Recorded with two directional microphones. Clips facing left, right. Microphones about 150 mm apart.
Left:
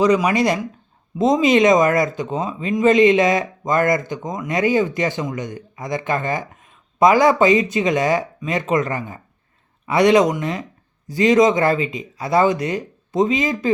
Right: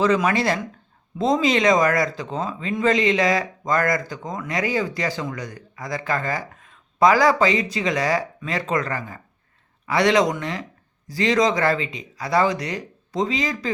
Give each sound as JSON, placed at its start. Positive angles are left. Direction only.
{"t": 0.0, "sound": "speech", "side_deg": 15}